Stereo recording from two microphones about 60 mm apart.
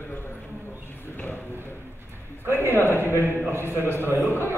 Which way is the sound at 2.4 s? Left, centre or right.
Right.